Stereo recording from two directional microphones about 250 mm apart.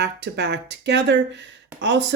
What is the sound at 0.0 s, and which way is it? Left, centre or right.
Speech, right.